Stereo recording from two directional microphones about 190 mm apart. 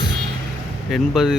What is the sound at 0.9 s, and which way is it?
Speech, centre (ahead or behind).